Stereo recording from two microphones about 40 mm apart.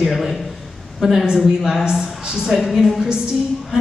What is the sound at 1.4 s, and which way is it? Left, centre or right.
Speech, centre.